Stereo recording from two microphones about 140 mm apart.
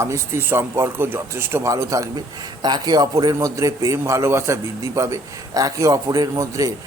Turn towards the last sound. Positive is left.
turn(degrees=-20)  # may be behind; listen again after turning